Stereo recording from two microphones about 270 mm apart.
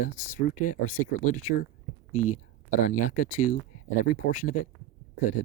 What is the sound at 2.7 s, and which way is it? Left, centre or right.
Speech, left.